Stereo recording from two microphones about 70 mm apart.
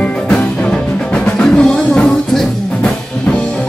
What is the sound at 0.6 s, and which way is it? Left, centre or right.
Music, centre.